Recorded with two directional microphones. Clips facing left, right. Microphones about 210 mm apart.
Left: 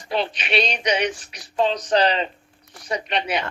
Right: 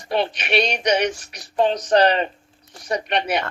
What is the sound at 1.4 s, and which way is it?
Speech, 45° right (ahead or behind).